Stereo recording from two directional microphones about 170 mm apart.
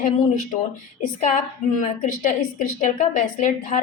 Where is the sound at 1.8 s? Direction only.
50° left (ahead or behind).